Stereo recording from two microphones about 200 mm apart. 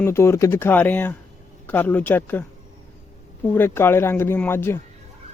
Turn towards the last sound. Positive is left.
turn(degrees=10)  # may be behind; listen again after turning